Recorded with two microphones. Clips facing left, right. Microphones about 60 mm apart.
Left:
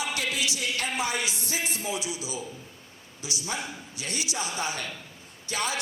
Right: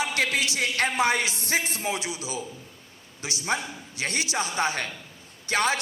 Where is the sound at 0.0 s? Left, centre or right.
Right.